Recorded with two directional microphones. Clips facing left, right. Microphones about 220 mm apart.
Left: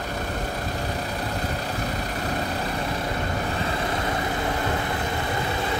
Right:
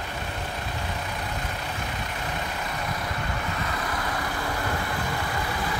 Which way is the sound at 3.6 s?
25° left (ahead or behind).